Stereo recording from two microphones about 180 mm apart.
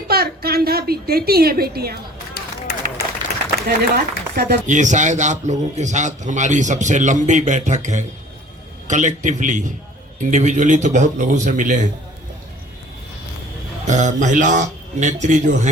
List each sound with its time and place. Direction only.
0.1 s a woman's voice: 60° right (ahead or behind)
2.4 s run: 60° left (ahead or behind)
3.3 s a sound: 60° left (ahead or behind)
3.7 s speech: 60° right (ahead or behind)
4.6 s a man's voice: 45° right (ahead or behind)
13.8 s a man's voice: 45° right (ahead or behind)